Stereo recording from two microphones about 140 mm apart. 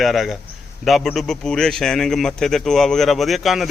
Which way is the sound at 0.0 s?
Centre (ahead or behind).